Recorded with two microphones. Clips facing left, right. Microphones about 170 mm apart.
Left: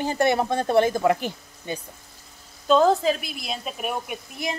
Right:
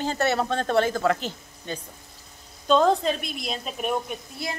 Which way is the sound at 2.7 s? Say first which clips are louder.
Left 2 dB; 5° left (ahead or behind).